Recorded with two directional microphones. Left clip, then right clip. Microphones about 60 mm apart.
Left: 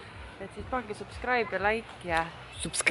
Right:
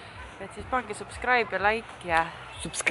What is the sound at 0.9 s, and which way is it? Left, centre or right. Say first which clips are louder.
Speech: right 3 dB; right.